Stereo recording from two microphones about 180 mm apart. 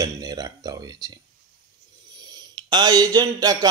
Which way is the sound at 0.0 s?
20° right (ahead or behind).